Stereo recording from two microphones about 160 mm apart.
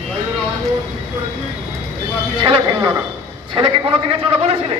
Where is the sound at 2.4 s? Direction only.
35° right (ahead or behind).